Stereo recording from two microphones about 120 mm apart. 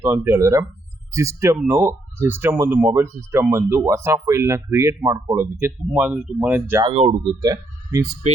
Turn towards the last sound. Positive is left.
turn(degrees=-30)  # may be behind; listen again after turning